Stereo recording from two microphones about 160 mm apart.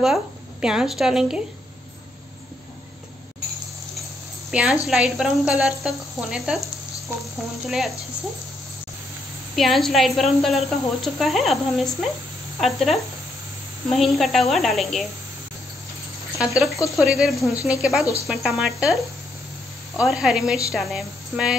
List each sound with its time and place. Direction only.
0.0 s speech: 5° right (ahead or behind)
4.5 s a woman's voice: 5° right (ahead or behind)
7.6 s speech: centre (ahead or behind)
9.6 s speech: centre (ahead or behind)
16.5 s speech: centre (ahead or behind)
20.1 s speech: 5° right (ahead or behind)